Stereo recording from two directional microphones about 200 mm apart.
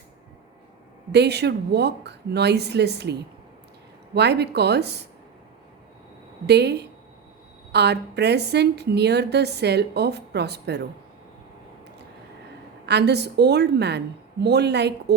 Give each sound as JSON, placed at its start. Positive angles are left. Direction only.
{"t": 1.1, "sound": "a woman's voice", "side_deg": -55}
{"t": 6.4, "sound": "a woman's voice", "side_deg": -55}
{"t": 12.8, "sound": "a woman's voice", "side_deg": -55}